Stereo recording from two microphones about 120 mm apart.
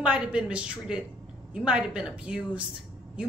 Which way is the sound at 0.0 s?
10° right (ahead or behind).